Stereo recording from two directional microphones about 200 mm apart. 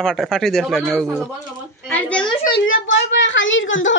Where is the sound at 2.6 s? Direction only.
70° left (ahead or behind).